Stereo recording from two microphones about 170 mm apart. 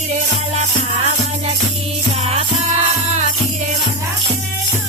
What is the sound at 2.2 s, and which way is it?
Music, 35° right (ahead or behind).